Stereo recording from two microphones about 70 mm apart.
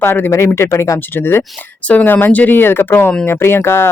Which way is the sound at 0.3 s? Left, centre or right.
Left.